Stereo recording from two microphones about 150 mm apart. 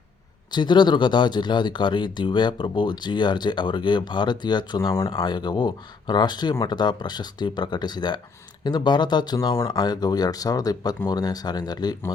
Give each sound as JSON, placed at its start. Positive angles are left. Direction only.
{"t": 0.5, "sound": "speech", "side_deg": 30}